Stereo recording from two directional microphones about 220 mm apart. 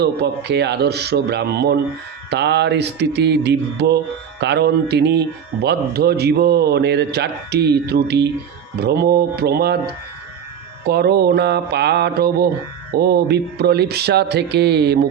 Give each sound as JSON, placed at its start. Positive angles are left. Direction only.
{"t": 0.0, "sound": "a man's voice", "side_deg": -50}